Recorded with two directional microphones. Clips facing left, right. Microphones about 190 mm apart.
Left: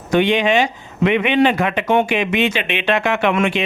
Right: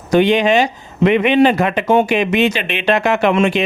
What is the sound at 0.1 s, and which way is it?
Speech, 40° right (ahead or behind).